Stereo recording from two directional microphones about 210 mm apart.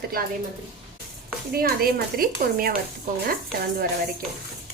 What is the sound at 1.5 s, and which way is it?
A woman's voice, 45° right (ahead or behind).